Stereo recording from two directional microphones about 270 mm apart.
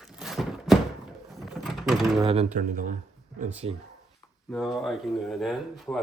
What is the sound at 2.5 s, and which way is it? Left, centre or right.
Speech, right.